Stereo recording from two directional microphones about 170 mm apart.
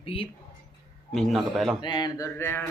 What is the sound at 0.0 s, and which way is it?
Speech, 35° left (ahead or behind).